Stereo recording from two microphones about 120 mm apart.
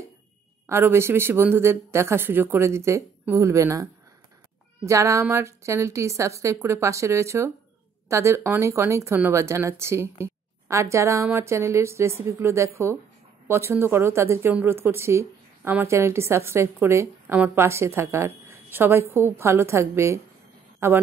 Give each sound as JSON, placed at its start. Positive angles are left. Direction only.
{"t": 0.7, "sound": "speech", "side_deg": -20}